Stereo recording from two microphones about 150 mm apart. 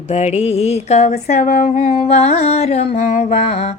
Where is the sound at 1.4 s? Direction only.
70° left (ahead or behind).